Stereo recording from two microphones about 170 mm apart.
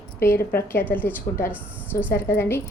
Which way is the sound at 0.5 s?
10° left (ahead or behind).